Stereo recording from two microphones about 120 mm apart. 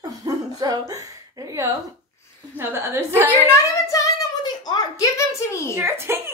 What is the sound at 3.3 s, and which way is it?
Speech, 20° left (ahead or behind).